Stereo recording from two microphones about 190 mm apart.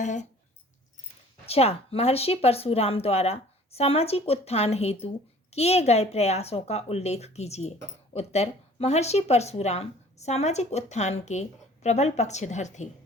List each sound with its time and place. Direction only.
0.0 s speech: 40° left (ahead or behind)
1.5 s speech: 30° left (ahead or behind)